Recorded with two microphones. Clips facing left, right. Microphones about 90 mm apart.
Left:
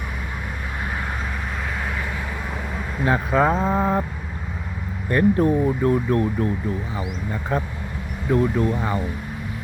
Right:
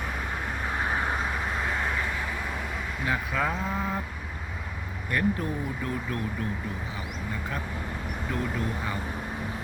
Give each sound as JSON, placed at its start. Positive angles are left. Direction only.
{"t": 3.1, "sound": "speech", "side_deg": 40}
{"t": 3.6, "sound": "vehicle", "side_deg": 50}
{"t": 5.0, "sound": "speech", "side_deg": 35}
{"t": 7.5, "sound": "speech", "side_deg": 30}